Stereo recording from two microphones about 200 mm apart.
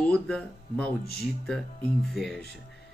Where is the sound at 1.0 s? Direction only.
50° left (ahead or behind).